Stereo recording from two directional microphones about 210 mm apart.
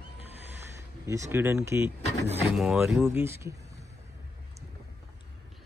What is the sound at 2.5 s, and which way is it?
Speech, centre (ahead or behind).